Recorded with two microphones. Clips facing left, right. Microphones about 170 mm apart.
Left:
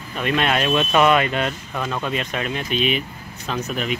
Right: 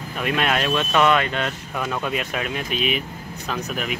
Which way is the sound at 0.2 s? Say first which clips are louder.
Left 2 dB; 5° right (ahead or behind).